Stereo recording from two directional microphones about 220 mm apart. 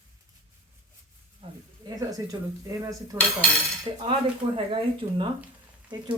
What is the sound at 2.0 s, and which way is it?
Speech, 15° right (ahead or behind).